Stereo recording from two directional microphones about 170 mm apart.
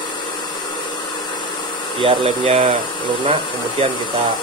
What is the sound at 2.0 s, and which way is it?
Speech, 35° right (ahead or behind).